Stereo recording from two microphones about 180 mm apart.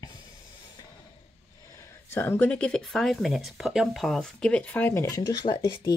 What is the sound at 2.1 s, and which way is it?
Speech, 10° left (ahead or behind).